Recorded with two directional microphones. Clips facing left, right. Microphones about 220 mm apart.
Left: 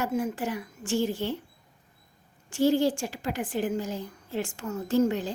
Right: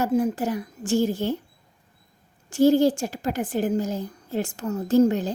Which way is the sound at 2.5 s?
40° right (ahead or behind).